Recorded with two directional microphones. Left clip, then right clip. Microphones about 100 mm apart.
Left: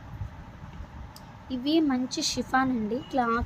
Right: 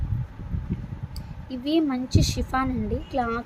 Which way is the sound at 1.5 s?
5° right (ahead or behind).